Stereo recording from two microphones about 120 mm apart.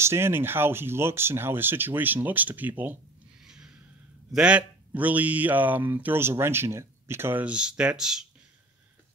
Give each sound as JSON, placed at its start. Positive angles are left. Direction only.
{"t": 0.0, "sound": "speech", "side_deg": -20}
{"t": 3.4, "sound": "a sound", "side_deg": -5}
{"t": 4.3, "sound": "speech", "side_deg": -10}